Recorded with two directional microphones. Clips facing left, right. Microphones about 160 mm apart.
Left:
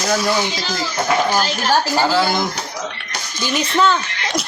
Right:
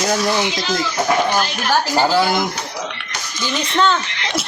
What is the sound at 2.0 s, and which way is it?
Speech, 15° right (ahead or behind).